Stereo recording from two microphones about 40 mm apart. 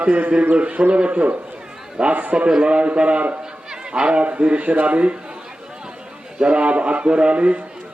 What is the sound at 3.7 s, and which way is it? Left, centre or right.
Speech, right.